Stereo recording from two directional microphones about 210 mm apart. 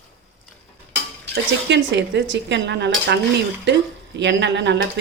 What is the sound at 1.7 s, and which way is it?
Speech, 55° right (ahead or behind).